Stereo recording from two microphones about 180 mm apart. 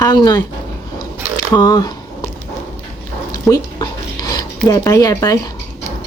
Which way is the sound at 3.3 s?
20° left (ahead or behind).